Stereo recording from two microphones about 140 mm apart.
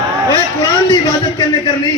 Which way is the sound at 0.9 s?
30° left (ahead or behind).